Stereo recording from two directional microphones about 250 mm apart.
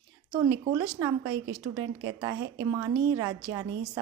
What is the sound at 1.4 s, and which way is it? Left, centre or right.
Speech, right.